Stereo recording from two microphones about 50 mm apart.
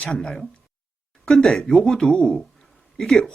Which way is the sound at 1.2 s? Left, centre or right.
Centre.